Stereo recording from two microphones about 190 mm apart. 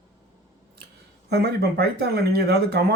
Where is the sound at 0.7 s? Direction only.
60° right (ahead or behind).